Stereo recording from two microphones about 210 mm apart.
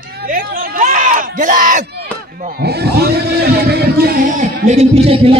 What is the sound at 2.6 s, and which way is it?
Speech, 50° right (ahead or behind).